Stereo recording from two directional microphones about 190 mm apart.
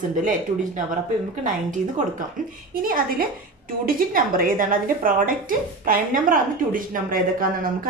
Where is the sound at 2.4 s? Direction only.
45° right (ahead or behind).